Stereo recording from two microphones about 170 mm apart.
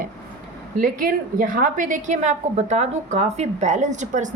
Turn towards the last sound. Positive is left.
turn(degrees=-45)  # may be behind; listen again after turning